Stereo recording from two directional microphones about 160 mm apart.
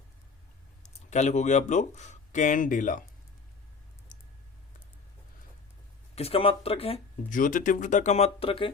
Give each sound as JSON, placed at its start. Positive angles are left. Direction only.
{"t": 0.8, "sound": "speech", "side_deg": 45}
{"t": 6.1, "sound": "speech", "side_deg": 40}
{"t": 7.3, "sound": "speech", "side_deg": 55}